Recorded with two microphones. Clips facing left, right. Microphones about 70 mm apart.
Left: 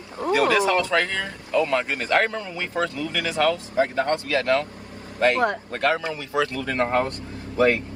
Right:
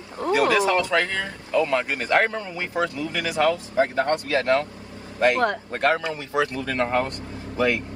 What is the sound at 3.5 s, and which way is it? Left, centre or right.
Speech, right.